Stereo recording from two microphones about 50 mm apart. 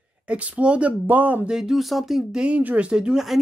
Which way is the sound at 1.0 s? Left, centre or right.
Right.